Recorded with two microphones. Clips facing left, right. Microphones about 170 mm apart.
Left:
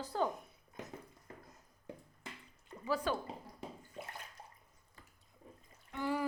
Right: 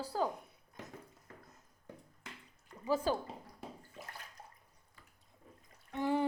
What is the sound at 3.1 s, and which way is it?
Speech, 35° right (ahead or behind).